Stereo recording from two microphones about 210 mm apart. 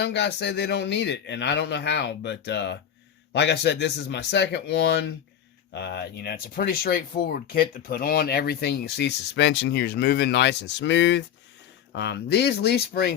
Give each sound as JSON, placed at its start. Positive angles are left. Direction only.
{"t": 0.0, "sound": "a man's voice", "side_deg": 55}